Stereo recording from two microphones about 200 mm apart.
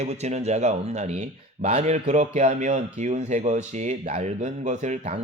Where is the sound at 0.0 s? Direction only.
35° right (ahead or behind).